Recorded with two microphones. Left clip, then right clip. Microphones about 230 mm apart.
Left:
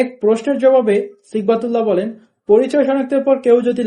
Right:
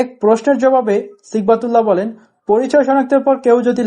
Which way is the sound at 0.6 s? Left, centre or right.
Right.